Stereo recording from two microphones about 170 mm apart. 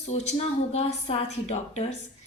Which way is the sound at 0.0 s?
40° left (ahead or behind).